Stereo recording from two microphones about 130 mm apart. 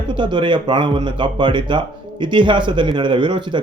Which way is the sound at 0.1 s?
35° right (ahead or behind).